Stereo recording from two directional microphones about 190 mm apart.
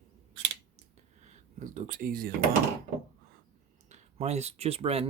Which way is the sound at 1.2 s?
40° right (ahead or behind).